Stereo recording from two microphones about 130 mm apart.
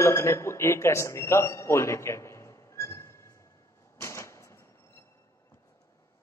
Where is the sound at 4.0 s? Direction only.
20° left (ahead or behind).